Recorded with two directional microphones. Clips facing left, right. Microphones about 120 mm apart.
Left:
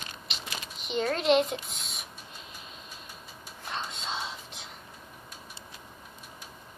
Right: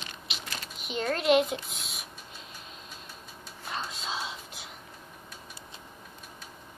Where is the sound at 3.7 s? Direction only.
5° right (ahead or behind).